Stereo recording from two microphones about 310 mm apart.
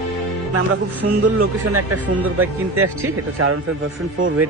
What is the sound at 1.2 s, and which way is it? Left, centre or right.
A man's voice, right.